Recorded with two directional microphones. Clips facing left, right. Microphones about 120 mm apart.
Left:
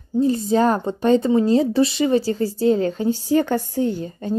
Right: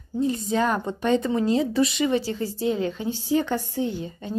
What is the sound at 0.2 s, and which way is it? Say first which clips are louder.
A woman's voice: left 6 dB; 35° left (ahead or behind).